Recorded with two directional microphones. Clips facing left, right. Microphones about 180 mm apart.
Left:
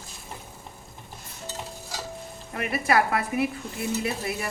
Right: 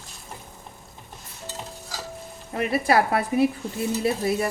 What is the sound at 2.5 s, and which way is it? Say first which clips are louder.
Speech: right 3 dB; 30° right (ahead or behind).